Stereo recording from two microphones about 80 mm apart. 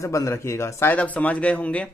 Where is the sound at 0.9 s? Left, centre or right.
Centre.